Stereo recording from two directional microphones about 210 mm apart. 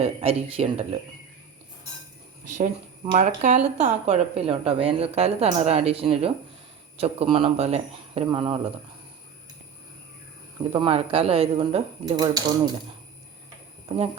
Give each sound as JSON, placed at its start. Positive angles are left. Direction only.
{"t": 0.0, "sound": "speech", "side_deg": -30}
{"t": 3.2, "sound": "speech", "side_deg": -35}
{"t": 10.6, "sound": "speech", "side_deg": -25}
{"t": 12.0, "sound": "speech", "side_deg": -20}
{"t": 13.8, "sound": "speech", "side_deg": -30}